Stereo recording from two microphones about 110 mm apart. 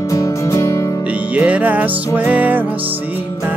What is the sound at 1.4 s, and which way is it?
Music, 15° right (ahead or behind).